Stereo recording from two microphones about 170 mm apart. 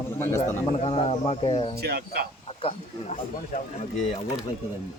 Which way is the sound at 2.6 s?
35° left (ahead or behind).